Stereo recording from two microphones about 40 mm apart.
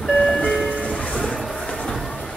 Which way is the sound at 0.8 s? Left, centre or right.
Left.